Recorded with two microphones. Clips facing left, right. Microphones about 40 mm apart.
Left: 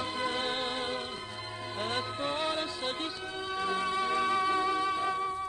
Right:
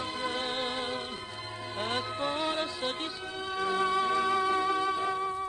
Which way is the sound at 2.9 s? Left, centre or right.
Right.